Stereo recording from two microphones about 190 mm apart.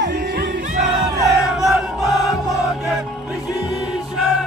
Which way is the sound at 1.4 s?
5° right (ahead or behind).